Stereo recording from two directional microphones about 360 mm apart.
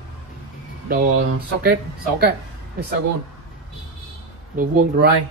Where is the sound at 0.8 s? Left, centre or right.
Right.